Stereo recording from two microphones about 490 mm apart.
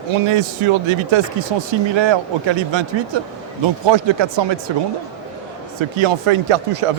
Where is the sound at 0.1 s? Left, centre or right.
Right.